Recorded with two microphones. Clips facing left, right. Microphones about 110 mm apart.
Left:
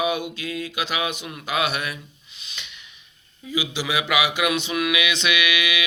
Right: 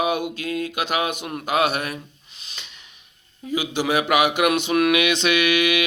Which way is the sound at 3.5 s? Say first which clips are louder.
Right 4 dB; 50° right (ahead or behind).